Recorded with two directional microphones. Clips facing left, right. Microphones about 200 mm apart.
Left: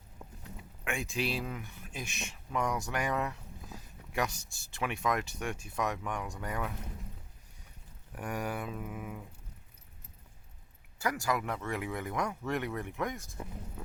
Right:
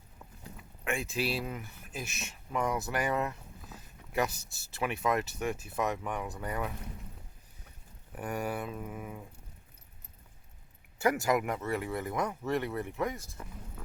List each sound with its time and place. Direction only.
0.9 s speech: centre (ahead or behind)
8.1 s speech: centre (ahead or behind)
10.9 s speech: 25° right (ahead or behind); by 13.1 s 5° right (ahead or behind)
13.4 s speech: 15° left (ahead or behind)